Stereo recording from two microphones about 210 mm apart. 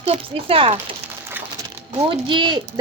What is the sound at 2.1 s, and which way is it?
Speech, 25° right (ahead or behind).